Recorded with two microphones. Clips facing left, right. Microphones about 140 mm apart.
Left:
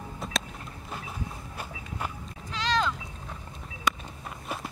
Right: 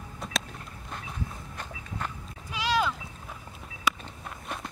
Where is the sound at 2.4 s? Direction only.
10° right (ahead or behind).